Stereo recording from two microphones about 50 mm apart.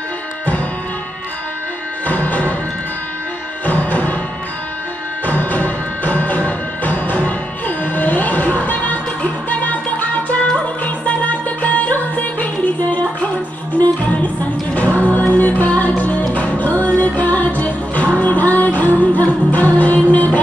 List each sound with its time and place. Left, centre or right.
2.0 s music: left
3.6 s music: left
5.2 s music: left
13.7 s music: left